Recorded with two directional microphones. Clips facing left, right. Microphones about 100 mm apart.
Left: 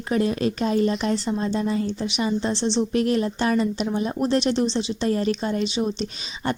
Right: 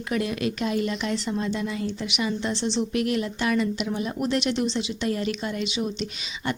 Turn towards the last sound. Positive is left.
turn(degrees=35)  # may be behind; listen again after turning